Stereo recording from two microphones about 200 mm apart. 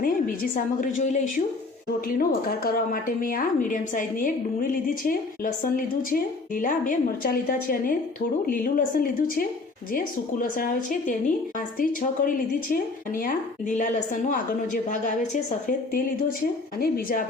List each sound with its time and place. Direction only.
0.0 s a woman's voice: 45° left (ahead or behind)